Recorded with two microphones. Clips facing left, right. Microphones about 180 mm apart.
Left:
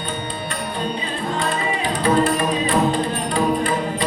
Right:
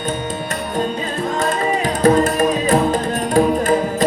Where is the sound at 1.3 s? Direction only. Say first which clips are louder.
Right 4 dB; 45° right (ahead or behind).